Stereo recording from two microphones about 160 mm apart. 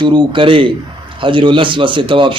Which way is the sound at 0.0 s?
30° right (ahead or behind).